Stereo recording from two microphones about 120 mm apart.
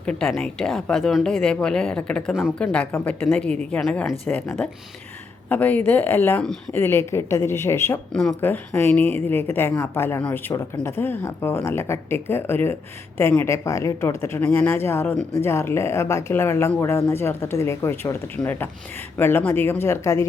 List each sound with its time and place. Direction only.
0.0 s a woman's voice: 10° left (ahead or behind)
4.0 s a woman's voice: 15° left (ahead or behind)
5.5 s a woman's voice: 15° left (ahead or behind)
8.1 s a woman's voice: 5° left (ahead or behind)
8.4 s a woman's voice: 15° left (ahead or behind)